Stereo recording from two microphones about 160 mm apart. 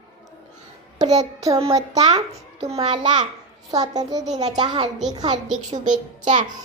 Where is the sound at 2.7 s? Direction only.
35° right (ahead or behind).